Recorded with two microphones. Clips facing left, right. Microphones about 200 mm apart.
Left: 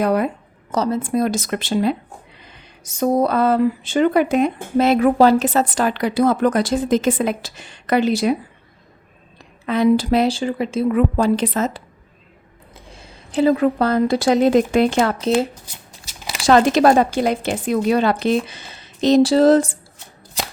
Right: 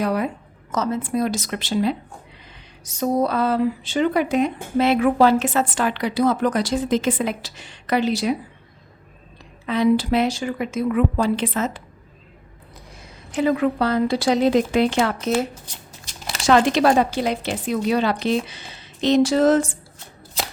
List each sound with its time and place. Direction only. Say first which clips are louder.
0.0 s a woman's voice: left 4 dB; 50° left (ahead or behind)
0.7 s speech: left 3 dB; 35° left (ahead or behind); by 2.0 s 50° left (ahead or behind)
3.0 s speech: left 3 dB; 55° left (ahead or behind)
9.6 s a woman's voice: left 2 dB; 50° left (ahead or behind)
12.9 s a woman's voice: left 4 dB; 30° left (ahead or behind); by 15.1 s 45° left (ahead or behind)
15.6 s shuffling cards: right 1 dB; 5° left (ahead or behind)
16.4 s speech: left 3 dB; 40° left (ahead or behind)